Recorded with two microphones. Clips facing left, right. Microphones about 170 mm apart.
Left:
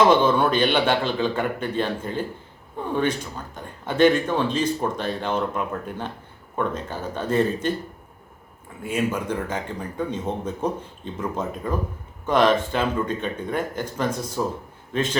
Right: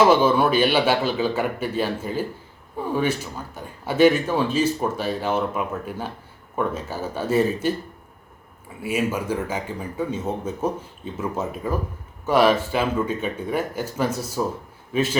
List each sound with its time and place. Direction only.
0.0 s speech: 5° right (ahead or behind)
8.8 s speech: 5° right (ahead or behind)